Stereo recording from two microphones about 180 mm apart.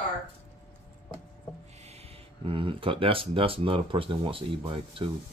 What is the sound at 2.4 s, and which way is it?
Speech, 30° right (ahead or behind).